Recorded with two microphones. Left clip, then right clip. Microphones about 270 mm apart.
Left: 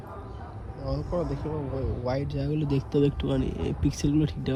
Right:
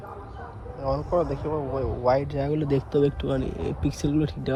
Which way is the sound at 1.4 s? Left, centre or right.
Right.